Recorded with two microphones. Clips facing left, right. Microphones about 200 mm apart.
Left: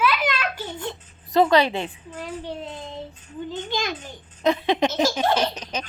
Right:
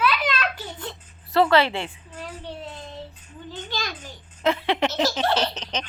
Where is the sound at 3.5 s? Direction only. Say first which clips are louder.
Left 4 dB; 20° left (ahead or behind).